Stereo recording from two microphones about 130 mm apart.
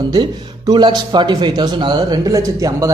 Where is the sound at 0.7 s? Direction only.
35° right (ahead or behind).